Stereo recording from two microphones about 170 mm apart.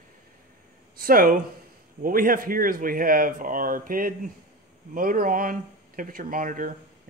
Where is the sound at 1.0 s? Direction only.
60° right (ahead or behind).